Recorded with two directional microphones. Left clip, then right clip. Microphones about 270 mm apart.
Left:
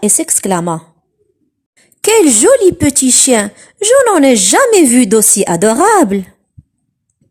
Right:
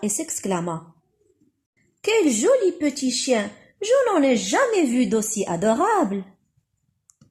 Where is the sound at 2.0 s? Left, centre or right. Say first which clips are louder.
Left 11 dB; left.